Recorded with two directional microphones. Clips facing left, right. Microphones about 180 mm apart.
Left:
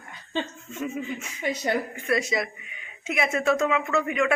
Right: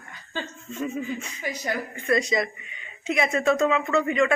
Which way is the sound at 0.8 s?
5° left (ahead or behind).